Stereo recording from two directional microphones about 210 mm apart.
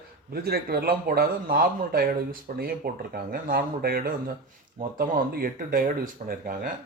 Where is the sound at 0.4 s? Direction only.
50° right (ahead or behind).